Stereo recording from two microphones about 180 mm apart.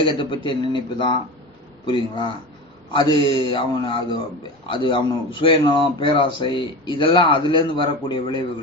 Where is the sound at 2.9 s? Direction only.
25° left (ahead or behind).